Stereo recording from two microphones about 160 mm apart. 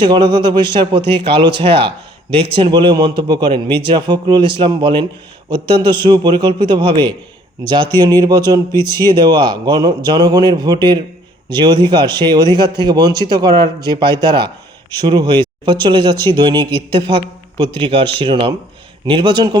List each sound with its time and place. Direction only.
0.0 s a man's voice: 30° right (ahead or behind)